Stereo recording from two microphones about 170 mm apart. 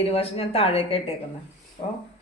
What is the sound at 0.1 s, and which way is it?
Speech, 35° left (ahead or behind).